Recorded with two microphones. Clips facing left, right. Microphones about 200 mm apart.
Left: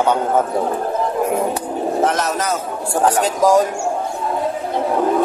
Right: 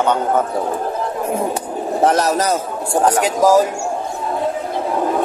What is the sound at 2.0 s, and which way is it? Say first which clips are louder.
Speech: right 4 dB; 35° right (ahead or behind).